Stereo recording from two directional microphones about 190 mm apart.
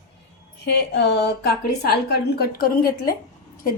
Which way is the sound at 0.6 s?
60° left (ahead or behind).